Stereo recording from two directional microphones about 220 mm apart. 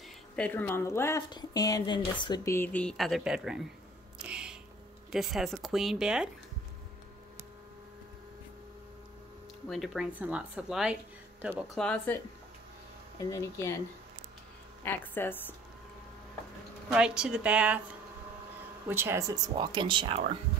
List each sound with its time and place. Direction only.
0.4 s speech: 10° left (ahead or behind)
4.2 s music: 5° right (ahead or behind)
5.1 s speech: centre (ahead or behind)
9.7 s speech: centre (ahead or behind)
13.3 s speech: 15° left (ahead or behind)
14.9 s speech: 10° left (ahead or behind)
16.9 s speech: 5° right (ahead or behind)
18.9 s speech: 10° right (ahead or behind)